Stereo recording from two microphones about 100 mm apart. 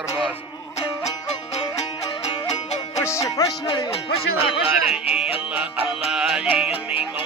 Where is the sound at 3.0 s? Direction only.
30° left (ahead or behind).